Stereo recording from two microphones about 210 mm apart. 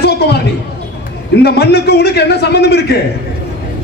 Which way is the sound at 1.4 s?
50° left (ahead or behind).